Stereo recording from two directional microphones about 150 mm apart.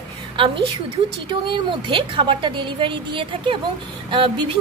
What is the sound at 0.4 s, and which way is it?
A woman's voice, 35° right (ahead or behind).